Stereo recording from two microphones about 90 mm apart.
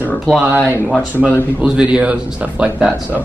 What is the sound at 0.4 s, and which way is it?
A man's voice, 15° right (ahead or behind).